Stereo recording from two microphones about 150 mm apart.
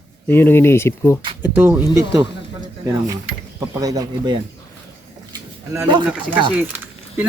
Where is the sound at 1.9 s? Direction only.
20° right (ahead or behind).